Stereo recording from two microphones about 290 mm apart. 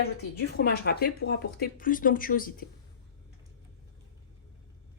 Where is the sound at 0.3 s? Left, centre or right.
Left.